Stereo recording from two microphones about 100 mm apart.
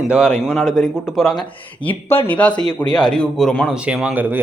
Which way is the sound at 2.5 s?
45° left (ahead or behind).